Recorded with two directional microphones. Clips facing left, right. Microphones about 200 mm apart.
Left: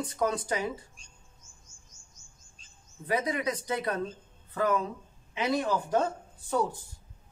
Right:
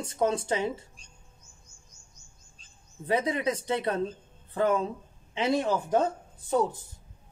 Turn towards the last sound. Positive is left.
turn(degrees=-20)  # may be behind; listen again after turning